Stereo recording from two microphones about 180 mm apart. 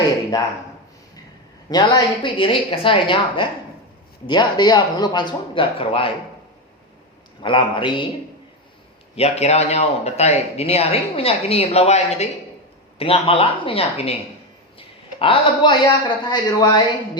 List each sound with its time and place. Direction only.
0.3 s a woman's voice: 20° left (ahead or behind)
1.7 s a woman's voice: 25° left (ahead or behind)
7.4 s a woman's voice: 25° left (ahead or behind)
9.1 s a man's voice: 35° left (ahead or behind)